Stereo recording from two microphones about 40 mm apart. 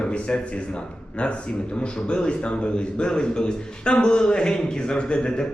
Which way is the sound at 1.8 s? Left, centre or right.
Left.